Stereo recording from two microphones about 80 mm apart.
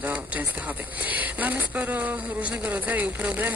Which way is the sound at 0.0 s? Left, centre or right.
Right.